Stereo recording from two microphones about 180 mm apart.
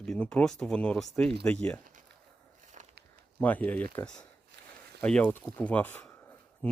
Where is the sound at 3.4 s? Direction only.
10° left (ahead or behind).